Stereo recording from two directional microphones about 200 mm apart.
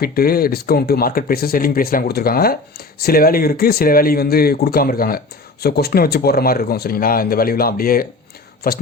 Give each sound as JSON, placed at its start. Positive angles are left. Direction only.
{"t": 0.0, "sound": "speech", "side_deg": 50}